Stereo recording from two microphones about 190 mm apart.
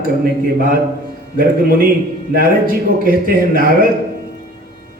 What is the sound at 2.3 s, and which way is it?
A man's voice, 50° right (ahead or behind).